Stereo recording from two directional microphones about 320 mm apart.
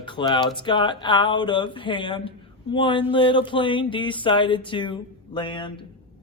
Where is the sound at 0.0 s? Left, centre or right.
Centre.